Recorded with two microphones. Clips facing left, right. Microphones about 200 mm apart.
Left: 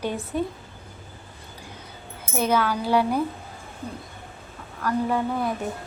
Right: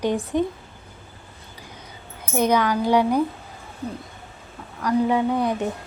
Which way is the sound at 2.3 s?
15° right (ahead or behind).